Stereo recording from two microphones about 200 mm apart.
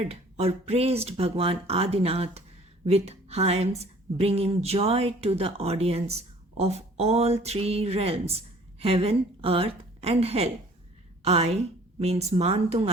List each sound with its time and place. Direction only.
0.0 s a woman's voice: 30° right (ahead or behind)